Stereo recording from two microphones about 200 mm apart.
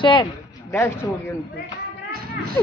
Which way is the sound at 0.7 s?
15° left (ahead or behind).